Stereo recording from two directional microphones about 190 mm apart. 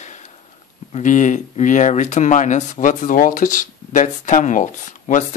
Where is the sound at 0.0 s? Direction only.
40° left (ahead or behind).